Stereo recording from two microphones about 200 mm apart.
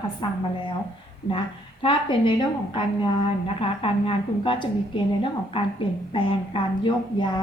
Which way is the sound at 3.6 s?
25° left (ahead or behind).